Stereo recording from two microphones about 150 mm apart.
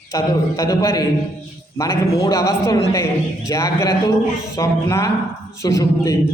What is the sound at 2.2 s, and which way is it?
A man's voice, 20° left (ahead or behind).